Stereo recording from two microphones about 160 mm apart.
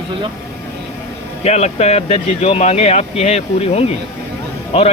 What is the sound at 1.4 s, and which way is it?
Speech, 40° left (ahead or behind).